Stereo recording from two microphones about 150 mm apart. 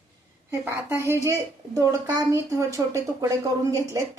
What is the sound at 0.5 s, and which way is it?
A woman's voice, 15° right (ahead or behind).